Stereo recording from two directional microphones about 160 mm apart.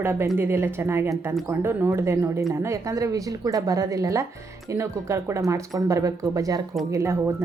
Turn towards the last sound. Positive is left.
turn(degrees=-15)  # may be behind; listen again after turning